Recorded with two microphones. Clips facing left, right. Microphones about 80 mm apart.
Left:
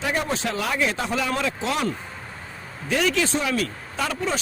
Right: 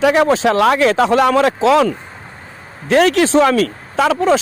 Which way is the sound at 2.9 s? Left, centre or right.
Right.